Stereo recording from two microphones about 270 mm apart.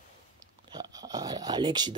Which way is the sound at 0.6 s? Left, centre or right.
Centre.